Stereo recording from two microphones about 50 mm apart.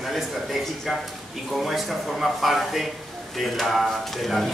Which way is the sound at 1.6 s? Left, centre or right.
Centre.